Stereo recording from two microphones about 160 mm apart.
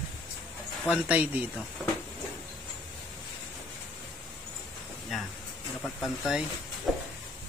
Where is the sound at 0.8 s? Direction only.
5° right (ahead or behind).